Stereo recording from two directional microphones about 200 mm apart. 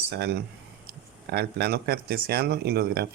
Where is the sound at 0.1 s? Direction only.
55° right (ahead or behind).